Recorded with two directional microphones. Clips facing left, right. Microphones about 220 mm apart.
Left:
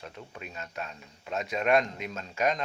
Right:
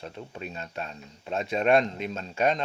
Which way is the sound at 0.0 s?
30° right (ahead or behind).